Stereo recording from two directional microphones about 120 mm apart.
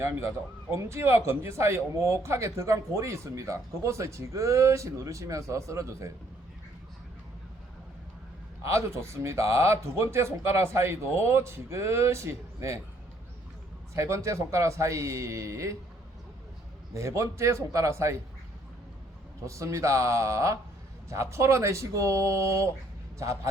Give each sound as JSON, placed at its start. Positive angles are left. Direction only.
{"t": 0.7, "sound": "speech", "side_deg": -25}
{"t": 8.6, "sound": "speech", "side_deg": -25}
{"t": 13.9, "sound": "speech", "side_deg": -25}
{"t": 16.9, "sound": "speech", "side_deg": -25}
{"t": 19.5, "sound": "speech", "side_deg": -25}